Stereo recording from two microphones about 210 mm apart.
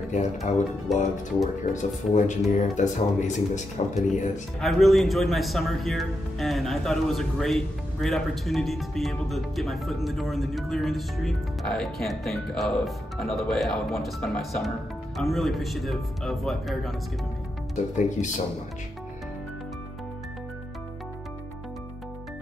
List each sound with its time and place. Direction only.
0.5 s speech: 35° left (ahead or behind)
0.9 s a man's voice: centre (ahead or behind)
1.7 s speech: 35° left (ahead or behind)
4.6 s a man's voice: centre (ahead or behind)
17.9 s speech: 35° left (ahead or behind)